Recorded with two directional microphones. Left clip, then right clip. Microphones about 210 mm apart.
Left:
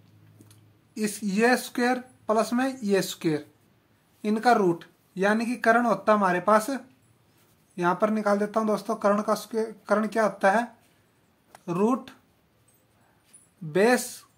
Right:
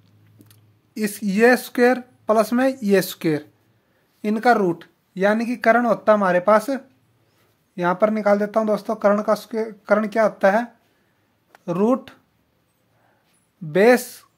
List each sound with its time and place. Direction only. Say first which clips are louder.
0.5 s speech: right 2 dB; 40° right (ahead or behind)
13.7 s speech: right 7 dB; 40° right (ahead or behind)